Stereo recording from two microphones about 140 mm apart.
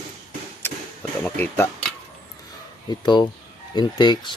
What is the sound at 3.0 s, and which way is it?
Speech, 30° left (ahead or behind).